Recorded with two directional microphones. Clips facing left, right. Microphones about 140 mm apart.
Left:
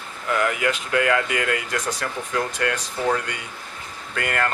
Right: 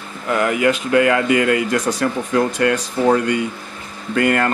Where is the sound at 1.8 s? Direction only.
25° right (ahead or behind).